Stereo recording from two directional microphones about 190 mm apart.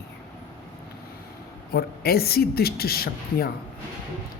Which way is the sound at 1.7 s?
55° left (ahead or behind).